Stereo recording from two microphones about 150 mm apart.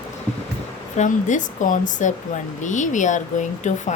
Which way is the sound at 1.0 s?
55° left (ahead or behind).